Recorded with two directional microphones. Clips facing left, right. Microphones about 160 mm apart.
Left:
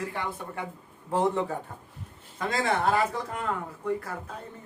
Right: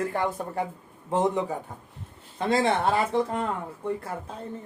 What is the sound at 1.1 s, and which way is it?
Speech, 20° right (ahead or behind).